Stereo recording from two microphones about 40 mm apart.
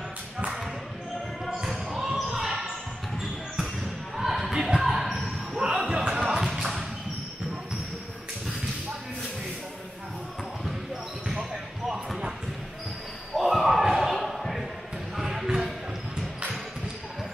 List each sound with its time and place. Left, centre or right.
1.7 s basketball bounce: centre
4.2 s music: centre
4.8 s basketball bounce: centre
5.7 s basketball bounce: centre
6.4 s a sound: centre
13.4 s basketball bounce: centre
14.4 s a sound: centre
15.1 s basketball bounce: centre